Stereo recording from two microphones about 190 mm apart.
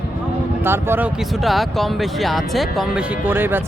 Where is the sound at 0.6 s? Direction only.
10° right (ahead or behind).